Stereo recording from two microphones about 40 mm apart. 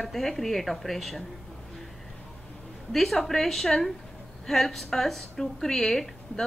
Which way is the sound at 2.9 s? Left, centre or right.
Centre.